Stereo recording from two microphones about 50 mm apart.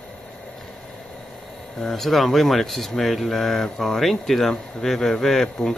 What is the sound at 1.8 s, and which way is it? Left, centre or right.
Speech, centre.